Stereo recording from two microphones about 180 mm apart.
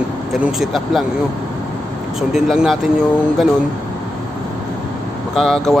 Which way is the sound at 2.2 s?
Centre (ahead or behind).